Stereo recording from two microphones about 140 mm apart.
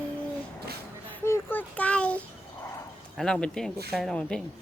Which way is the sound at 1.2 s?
15° left (ahead or behind).